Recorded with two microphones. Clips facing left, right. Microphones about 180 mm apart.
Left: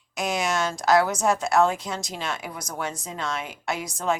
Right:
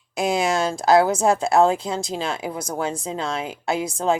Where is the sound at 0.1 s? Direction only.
30° right (ahead or behind).